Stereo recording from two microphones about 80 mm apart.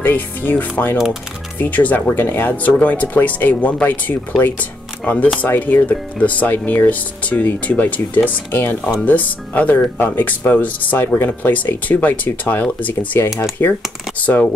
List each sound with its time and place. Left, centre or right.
0.0 s speech: left